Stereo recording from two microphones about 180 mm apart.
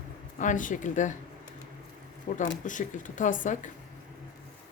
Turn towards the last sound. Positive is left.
turn(degrees=45)  # may be behind; listen again after turning